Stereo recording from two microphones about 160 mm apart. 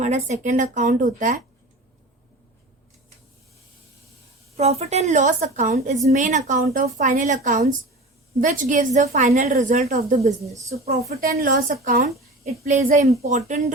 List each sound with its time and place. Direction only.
0.0 s a woman's voice: 45° right (ahead or behind)
4.5 s a woman's voice: 40° right (ahead or behind)
11.1 s a woman's voice: 65° right (ahead or behind)
12.5 s a woman's voice: 50° right (ahead or behind)